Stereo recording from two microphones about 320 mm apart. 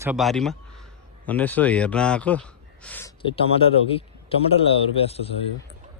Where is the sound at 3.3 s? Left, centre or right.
Centre.